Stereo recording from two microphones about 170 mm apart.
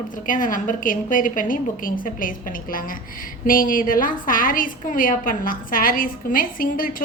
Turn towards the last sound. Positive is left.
turn(degrees=55)  # may be behind; listen again after turning